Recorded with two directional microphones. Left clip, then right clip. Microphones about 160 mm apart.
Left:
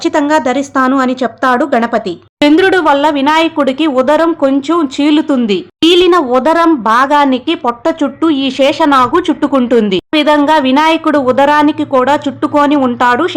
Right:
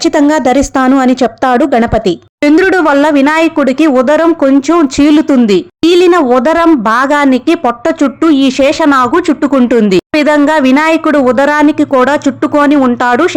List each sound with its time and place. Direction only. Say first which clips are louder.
0.0 s speech: right 2 dB; 35° right (ahead or behind)